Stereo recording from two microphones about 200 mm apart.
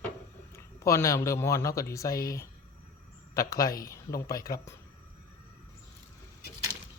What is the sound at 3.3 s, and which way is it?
Speech, 15° left (ahead or behind).